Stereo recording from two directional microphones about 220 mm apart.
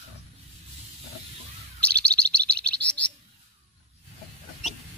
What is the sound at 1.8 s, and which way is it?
Chirp, 5° left (ahead or behind).